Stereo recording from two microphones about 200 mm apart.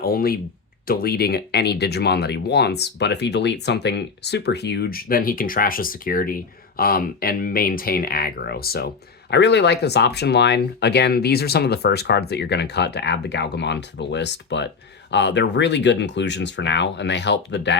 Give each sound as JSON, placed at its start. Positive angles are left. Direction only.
{"t": 0.0, "sound": "speech", "side_deg": 50}